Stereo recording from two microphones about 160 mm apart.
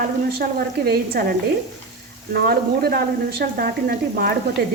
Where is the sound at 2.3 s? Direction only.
75° right (ahead or behind).